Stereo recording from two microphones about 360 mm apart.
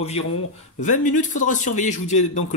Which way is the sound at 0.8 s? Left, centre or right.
Left.